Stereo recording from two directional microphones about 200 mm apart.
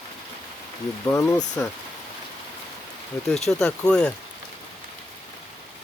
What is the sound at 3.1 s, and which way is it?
Speech, 5° left (ahead or behind).